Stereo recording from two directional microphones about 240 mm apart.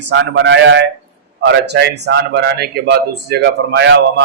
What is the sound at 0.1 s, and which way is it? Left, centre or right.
Speech, right.